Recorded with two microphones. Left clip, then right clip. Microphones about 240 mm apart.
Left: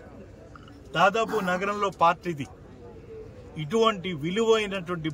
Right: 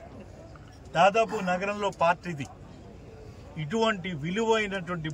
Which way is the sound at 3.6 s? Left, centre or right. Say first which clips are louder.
Left 4 dB; centre.